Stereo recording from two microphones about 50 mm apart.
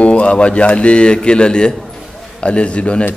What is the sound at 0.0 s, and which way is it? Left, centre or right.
A man's voice, left.